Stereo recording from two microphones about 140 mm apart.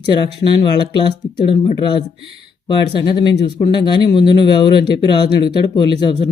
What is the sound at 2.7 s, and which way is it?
Speech, 35° left (ahead or behind).